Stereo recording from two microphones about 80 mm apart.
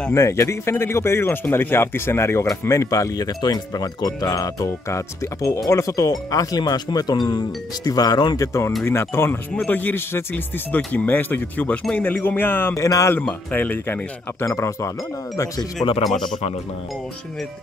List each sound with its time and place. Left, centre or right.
0.1 s speech: left
8.4 s speech: left
12.7 s speech: left
13.5 s speech: left
14.4 s speech: left